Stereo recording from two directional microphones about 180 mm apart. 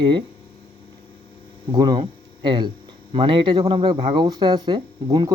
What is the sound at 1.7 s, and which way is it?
Speech, 25° right (ahead or behind).